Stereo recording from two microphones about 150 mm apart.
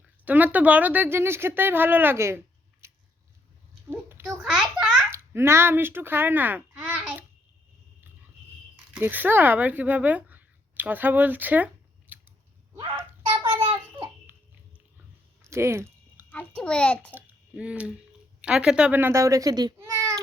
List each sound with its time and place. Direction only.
0.3 s speech: 10° right (ahead or behind)
2.8 s biting: 15° right (ahead or behind)
4.3 s a sound: 5° right (ahead or behind)
5.1 s a child's voice: 15° right (ahead or behind)
8.9 s speech: 10° right (ahead or behind)
12.7 s a sound: 30° right (ahead or behind)
14.3 s a sound: 15° right (ahead or behind)
16.3 s a child's voice: 10° left (ahead or behind)
17.2 s speech: 10° right (ahead or behind); by 19.7 s 25° right (ahead or behind)